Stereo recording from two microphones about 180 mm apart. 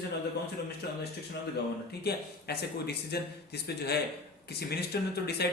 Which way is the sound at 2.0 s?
65° left (ahead or behind).